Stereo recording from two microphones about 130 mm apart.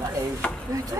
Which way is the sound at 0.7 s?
25° right (ahead or behind).